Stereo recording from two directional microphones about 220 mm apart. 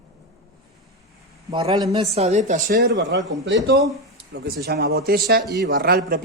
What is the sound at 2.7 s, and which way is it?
Speech, 50° right (ahead or behind).